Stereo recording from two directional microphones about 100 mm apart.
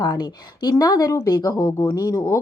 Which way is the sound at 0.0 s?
45° left (ahead or behind).